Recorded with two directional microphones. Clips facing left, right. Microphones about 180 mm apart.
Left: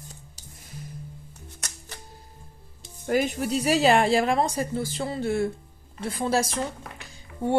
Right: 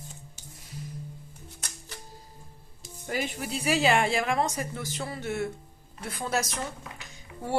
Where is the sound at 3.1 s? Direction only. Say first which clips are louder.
Left 8 dB; 45° left (ahead or behind).